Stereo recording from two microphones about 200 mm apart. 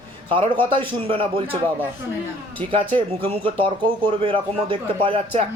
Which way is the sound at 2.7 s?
25° right (ahead or behind).